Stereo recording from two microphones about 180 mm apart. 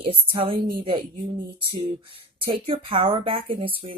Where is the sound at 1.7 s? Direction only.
30° right (ahead or behind).